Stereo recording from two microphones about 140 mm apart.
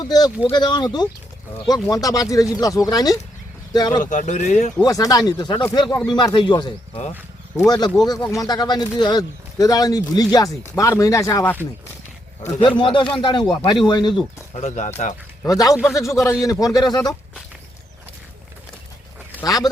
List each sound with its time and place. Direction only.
0.0 s speech: 30° left (ahead or behind)
4.0 s speech: 65° left (ahead or behind)
4.8 s speech: 25° left (ahead or behind)
12.5 s speech: 35° left (ahead or behind)
14.5 s speech: 55° left (ahead or behind)
15.4 s speech: 25° left (ahead or behind)
19.5 s speech: 25° left (ahead or behind)